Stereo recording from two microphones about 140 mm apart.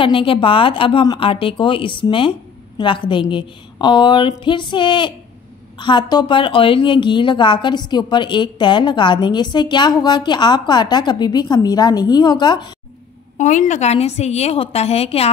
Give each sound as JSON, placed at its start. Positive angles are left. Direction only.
{"t": 0.0, "sound": "a woman's voice", "side_deg": 40}
{"t": 13.4, "sound": "a woman's voice", "side_deg": 60}